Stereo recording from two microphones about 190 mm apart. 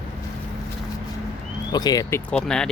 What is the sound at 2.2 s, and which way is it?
Speech, 5° left (ahead or behind).